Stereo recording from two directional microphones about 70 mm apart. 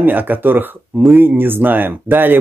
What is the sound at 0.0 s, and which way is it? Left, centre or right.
Speech, right.